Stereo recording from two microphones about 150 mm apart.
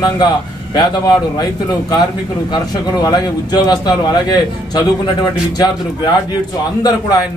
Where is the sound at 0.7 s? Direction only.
25° left (ahead or behind).